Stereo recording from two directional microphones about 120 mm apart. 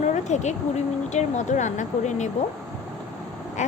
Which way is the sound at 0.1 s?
80° left.